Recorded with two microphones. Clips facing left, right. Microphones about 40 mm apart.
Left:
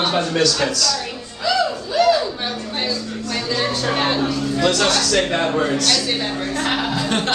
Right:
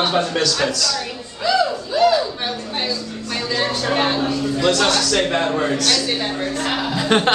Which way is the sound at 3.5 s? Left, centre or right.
Centre.